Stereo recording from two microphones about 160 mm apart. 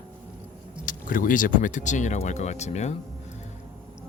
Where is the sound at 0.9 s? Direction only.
60° left (ahead or behind).